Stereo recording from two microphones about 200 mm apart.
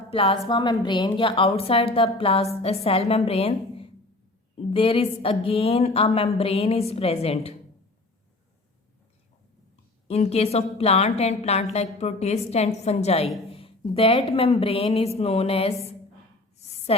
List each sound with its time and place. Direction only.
0.1 s a woman's voice: 30° left (ahead or behind)
10.1 s a woman's voice: 30° left (ahead or behind)